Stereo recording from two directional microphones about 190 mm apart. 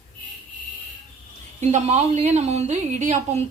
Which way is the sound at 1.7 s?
40° right (ahead or behind).